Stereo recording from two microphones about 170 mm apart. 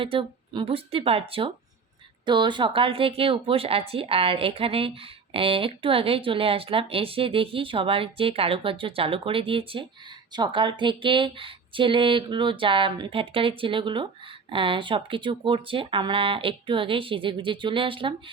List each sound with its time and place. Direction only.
0.0 s speech: 30° right (ahead or behind)